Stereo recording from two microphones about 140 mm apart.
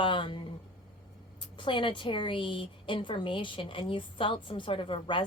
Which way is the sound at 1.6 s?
35° left (ahead or behind).